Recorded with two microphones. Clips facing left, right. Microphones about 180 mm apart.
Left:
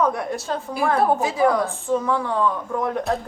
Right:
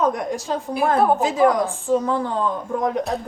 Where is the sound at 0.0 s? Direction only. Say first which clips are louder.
Right 1 dB; 15° right (ahead or behind).